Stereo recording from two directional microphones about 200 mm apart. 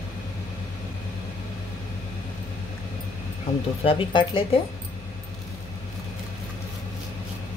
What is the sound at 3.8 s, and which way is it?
Speech, 25° left (ahead or behind).